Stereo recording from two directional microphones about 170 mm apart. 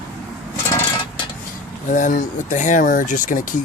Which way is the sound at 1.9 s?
50° left (ahead or behind).